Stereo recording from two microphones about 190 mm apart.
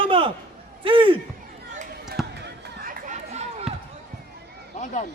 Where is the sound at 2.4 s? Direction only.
50° right (ahead or behind).